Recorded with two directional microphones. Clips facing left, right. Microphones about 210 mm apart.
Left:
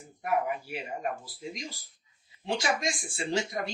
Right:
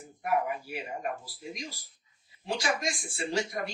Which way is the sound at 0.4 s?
25° left (ahead or behind).